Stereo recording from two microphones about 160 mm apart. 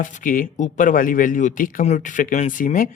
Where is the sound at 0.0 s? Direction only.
55° left (ahead or behind).